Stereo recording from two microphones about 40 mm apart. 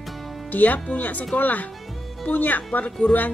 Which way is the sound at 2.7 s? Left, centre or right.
Left.